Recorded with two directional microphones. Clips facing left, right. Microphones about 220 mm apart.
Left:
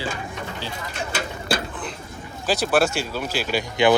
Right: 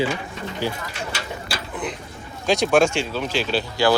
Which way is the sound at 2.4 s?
5° left (ahead or behind).